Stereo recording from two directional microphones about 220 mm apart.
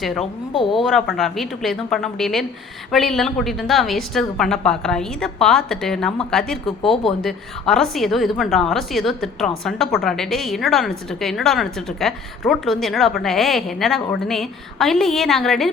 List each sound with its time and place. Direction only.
0.0 s a woman's voice: centre (ahead or behind)
0.5 s speech: 20° left (ahead or behind)
0.8 s a woman's voice: centre (ahead or behind)
6.7 s speech: 25° left (ahead or behind)
7.2 s a woman's voice: centre (ahead or behind)